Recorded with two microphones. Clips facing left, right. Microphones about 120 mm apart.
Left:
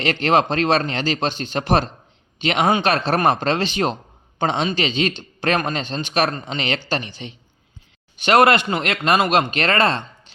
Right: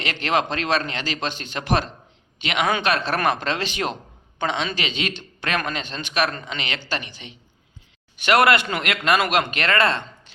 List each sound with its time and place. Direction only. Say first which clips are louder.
0.0 s speech: left 5 dB; 30° left (ahead or behind)